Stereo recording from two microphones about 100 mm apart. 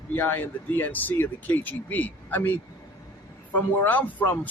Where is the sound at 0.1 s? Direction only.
20° left (ahead or behind).